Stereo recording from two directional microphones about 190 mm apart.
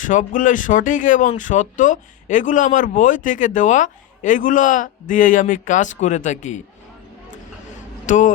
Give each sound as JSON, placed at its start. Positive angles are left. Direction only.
{"t": 0.0, "sound": "speech", "side_deg": 40}
{"t": 8.0, "sound": "speech", "side_deg": 40}